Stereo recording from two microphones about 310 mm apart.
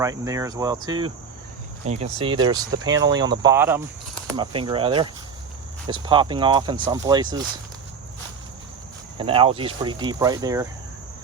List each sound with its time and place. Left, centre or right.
0.0 s speech: centre
9.1 s speech: centre